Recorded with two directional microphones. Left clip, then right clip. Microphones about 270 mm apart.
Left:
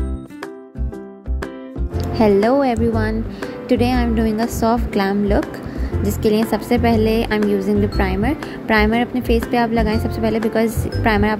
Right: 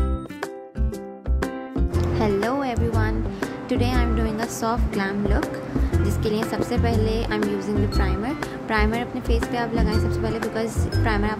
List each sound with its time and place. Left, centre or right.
2.0 s speech: centre